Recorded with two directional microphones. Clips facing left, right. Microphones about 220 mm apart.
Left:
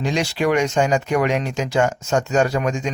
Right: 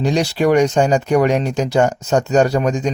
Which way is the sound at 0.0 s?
35° right (ahead or behind).